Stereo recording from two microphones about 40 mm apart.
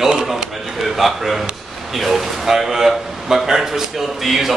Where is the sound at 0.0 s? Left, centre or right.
Centre.